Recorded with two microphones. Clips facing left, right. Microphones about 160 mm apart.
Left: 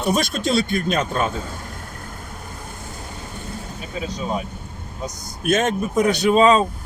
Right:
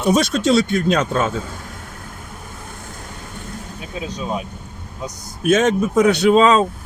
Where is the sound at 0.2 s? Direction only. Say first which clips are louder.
Right 5 dB; 80° right.